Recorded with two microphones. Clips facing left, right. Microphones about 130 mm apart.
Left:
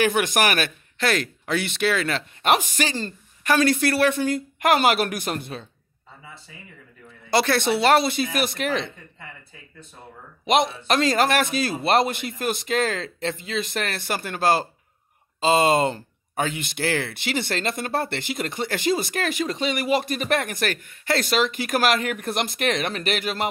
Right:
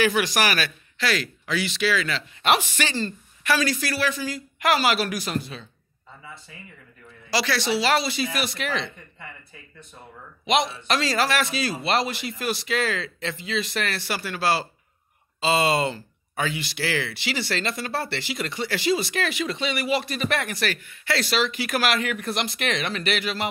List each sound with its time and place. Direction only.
0.0 s speech: 50° left (ahead or behind)
7.2 s speech: 55° left (ahead or behind)
10.4 s speech: 45° left (ahead or behind)